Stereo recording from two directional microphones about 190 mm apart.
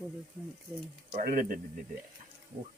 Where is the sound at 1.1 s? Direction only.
40° right (ahead or behind).